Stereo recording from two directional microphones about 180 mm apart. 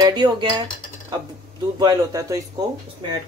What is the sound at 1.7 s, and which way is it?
Speech, 20° right (ahead or behind).